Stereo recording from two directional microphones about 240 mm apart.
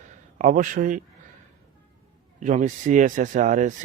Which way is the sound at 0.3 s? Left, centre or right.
Right.